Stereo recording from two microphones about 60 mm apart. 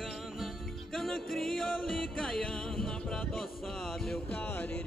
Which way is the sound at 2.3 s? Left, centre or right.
Centre.